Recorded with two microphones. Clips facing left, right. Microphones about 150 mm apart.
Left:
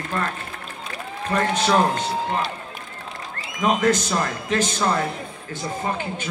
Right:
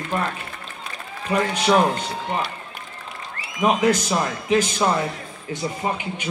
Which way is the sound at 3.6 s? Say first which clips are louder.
Right 1 dB; 10° right (ahead or behind).